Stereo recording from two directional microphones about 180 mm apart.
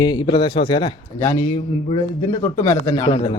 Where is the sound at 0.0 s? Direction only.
25° left (ahead or behind).